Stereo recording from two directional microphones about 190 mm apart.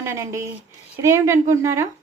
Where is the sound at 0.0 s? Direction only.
15° right (ahead or behind).